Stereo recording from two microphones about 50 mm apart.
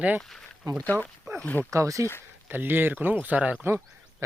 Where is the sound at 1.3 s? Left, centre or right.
Right.